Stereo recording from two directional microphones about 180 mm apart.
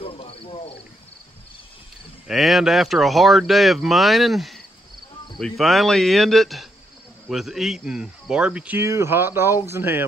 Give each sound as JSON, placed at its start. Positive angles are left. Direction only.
{"t": 0.0, "sound": "cricket", "side_deg": 30}
{"t": 2.2, "sound": "speech", "side_deg": 0}